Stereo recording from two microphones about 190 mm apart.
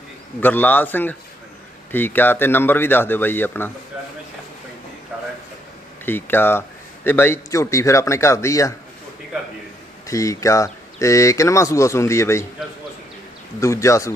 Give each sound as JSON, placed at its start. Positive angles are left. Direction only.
{"t": 0.3, "sound": "a man's voice", "side_deg": 10}
{"t": 6.1, "sound": "a man's voice", "side_deg": 10}
{"t": 10.1, "sound": "a man's voice", "side_deg": 15}
{"t": 13.6, "sound": "a man's voice", "side_deg": 15}